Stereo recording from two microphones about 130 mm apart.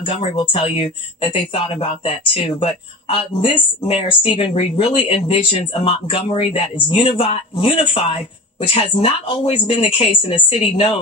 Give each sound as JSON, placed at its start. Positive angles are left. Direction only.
{"t": 0.0, "sound": "speech", "side_deg": 45}